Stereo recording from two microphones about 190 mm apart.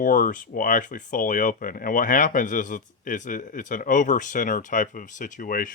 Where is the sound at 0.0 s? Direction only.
45° left (ahead or behind).